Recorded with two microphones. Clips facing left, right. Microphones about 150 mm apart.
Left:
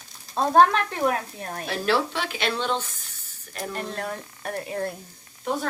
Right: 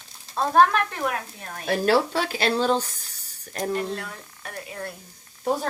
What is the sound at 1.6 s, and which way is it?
Speech, 40° right (ahead or behind).